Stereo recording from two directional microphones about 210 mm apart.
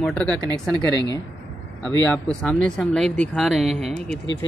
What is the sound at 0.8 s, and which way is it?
Speech, 20° right (ahead or behind).